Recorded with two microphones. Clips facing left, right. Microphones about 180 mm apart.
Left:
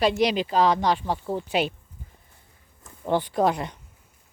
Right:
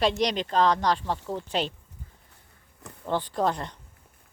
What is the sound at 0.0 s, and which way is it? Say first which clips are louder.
Speech: left 3 dB; 5° left (ahead or behind).